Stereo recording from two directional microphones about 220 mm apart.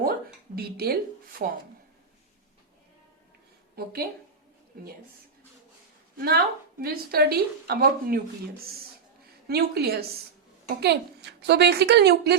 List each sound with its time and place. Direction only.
0.0 s a sound: 45° right (ahead or behind)
1.4 s speech: 40° right (ahead or behind)
6.1 s a woman's voice: 45° right (ahead or behind)
9.5 s a woman's voice: 45° right (ahead or behind)